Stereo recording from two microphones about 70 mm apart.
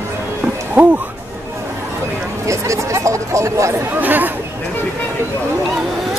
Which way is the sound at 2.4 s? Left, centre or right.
Right.